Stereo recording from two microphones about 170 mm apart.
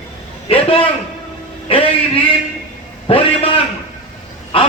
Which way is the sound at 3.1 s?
35° left (ahead or behind).